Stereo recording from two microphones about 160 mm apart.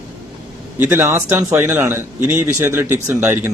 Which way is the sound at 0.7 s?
15° right (ahead or behind).